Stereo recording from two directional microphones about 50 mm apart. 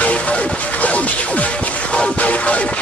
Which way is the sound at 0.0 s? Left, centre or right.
Left.